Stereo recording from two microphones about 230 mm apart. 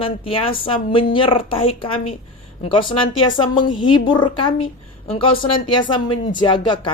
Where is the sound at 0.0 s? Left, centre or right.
Left.